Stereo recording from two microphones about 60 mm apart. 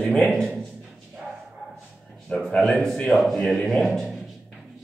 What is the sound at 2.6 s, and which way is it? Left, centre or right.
A man's voice, centre.